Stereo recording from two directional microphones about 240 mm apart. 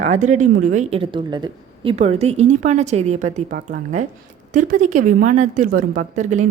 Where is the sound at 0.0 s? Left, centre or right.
Right.